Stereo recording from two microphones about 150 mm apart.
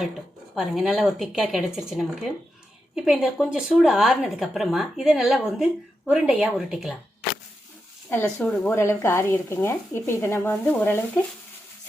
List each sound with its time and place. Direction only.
0.5 s a woman's voice: centre (ahead or behind)
8.1 s speech: 10° left (ahead or behind)